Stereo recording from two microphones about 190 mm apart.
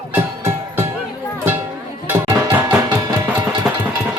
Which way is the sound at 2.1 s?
10° right (ahead or behind).